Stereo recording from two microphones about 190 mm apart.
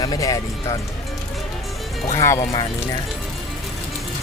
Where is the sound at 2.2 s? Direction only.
15° left (ahead or behind).